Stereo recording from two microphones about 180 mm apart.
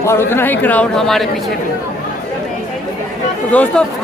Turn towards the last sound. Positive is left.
turn(degrees=10)  # may be behind; listen again after turning